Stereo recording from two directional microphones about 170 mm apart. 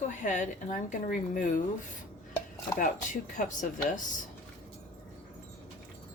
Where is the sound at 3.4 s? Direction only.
55° left (ahead or behind).